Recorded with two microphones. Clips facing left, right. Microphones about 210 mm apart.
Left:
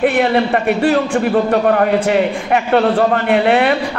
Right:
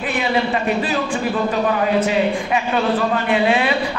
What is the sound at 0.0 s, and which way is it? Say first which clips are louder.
A man's voice: left 7 dB; 60° left (ahead or behind).